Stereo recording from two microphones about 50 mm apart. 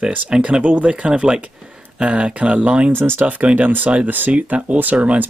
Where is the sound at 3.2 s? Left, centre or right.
Right.